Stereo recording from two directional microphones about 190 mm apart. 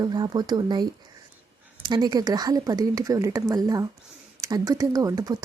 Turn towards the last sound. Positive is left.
turn(degrees=-20)  # may be behind; listen again after turning